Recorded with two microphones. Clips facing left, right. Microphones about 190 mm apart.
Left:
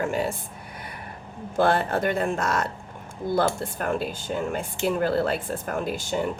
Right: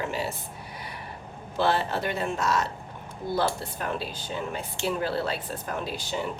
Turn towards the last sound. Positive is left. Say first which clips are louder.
# left 5 dB
turn(degrees=50)  # may be behind; listen again after turning